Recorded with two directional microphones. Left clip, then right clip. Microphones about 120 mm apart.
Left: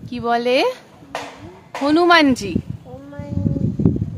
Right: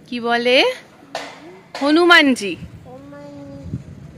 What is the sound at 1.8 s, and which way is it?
Speech, 15° left (ahead or behind).